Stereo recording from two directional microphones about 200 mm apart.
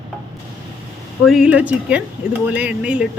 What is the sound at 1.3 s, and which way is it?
Speech, 5° right (ahead or behind).